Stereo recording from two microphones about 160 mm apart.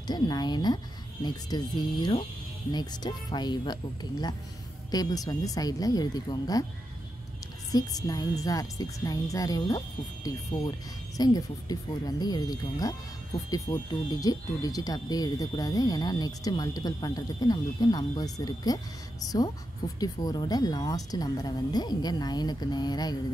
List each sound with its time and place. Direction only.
0.0 s speech: 25° left (ahead or behind)
7.7 s speech: 25° left (ahead or behind)